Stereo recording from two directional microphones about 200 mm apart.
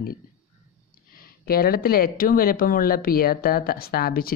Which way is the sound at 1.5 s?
50° left (ahead or behind).